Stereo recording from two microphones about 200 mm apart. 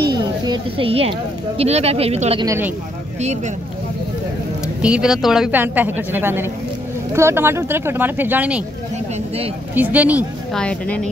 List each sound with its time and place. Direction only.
0.0 s a sound: 20° right (ahead or behind)
1.6 s speech: 30° right (ahead or behind)
2.4 s speech: 15° right (ahead or behind)
4.8 s speech: 5° right (ahead or behind)
9.8 s a woman's voice: 10° right (ahead or behind)
10.6 s a woman's voice: 5° left (ahead or behind)